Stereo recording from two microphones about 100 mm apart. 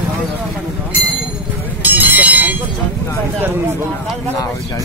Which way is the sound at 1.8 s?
15° right (ahead or behind).